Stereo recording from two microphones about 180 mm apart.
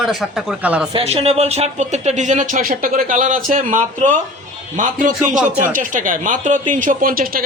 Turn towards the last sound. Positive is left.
turn(degrees=-55)  # may be behind; listen again after turning